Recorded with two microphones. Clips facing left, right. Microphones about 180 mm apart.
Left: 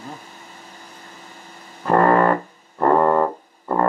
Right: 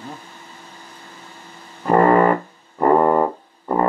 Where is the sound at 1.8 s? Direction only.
15° right (ahead or behind).